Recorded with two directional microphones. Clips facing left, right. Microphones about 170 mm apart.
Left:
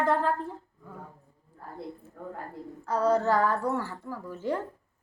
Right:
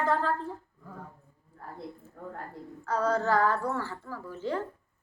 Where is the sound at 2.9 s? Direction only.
20° left (ahead or behind).